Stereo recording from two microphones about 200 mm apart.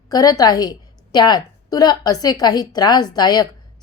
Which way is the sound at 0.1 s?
20° left (ahead or behind).